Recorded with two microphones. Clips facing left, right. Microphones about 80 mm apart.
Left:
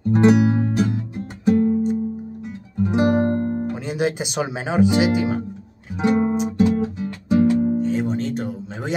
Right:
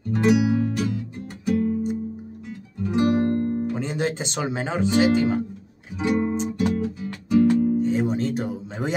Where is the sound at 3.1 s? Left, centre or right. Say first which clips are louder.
Left 2 dB; left.